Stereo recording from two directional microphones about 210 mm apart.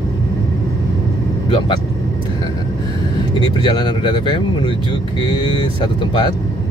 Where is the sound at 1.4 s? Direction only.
25° left (ahead or behind).